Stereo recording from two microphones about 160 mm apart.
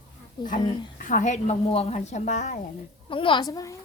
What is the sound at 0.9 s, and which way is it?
A woman's voice, 60° left (ahead or behind).